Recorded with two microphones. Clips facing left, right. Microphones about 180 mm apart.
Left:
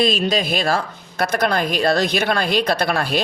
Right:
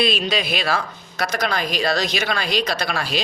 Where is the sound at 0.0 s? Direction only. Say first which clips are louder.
Left 3 dB; 45° left (ahead or behind).